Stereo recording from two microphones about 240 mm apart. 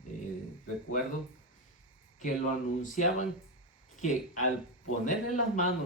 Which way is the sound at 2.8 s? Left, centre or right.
Left.